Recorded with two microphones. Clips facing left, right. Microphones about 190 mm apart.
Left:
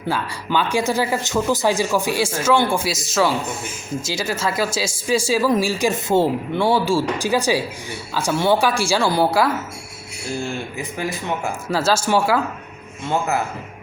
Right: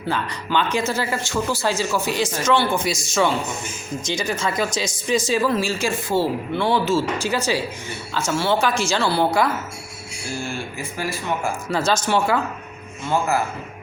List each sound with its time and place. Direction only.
0.1 s speech: 10° left (ahead or behind)
10.3 s speech: 20° left (ahead or behind)
11.7 s speech: 5° left (ahead or behind)